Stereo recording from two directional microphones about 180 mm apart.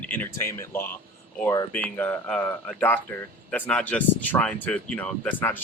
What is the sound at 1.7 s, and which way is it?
Speech, 5° left (ahead or behind).